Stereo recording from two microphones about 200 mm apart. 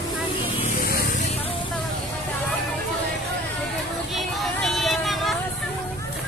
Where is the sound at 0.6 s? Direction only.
45° left (ahead or behind).